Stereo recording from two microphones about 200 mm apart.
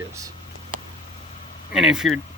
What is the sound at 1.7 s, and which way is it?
Speech, centre (ahead or behind).